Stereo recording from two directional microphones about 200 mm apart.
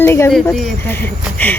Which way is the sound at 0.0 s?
10° left (ahead or behind).